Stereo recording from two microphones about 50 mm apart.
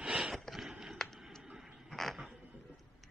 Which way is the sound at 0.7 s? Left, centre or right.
Centre.